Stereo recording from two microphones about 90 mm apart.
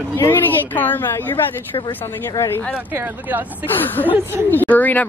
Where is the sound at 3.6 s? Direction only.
20° left (ahead or behind).